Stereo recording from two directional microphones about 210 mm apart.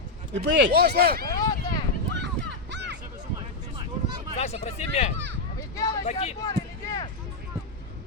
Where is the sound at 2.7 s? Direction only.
55° right (ahead or behind).